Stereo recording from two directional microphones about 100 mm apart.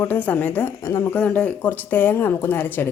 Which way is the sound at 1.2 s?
15° left (ahead or behind).